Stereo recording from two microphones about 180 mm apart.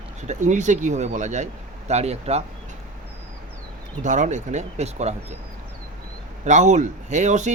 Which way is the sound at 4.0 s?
45° right (ahead or behind).